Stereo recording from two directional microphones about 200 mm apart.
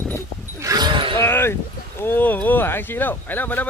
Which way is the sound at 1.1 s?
10° left (ahead or behind).